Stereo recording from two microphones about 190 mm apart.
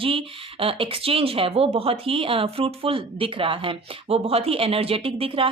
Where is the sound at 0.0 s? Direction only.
30° right (ahead or behind).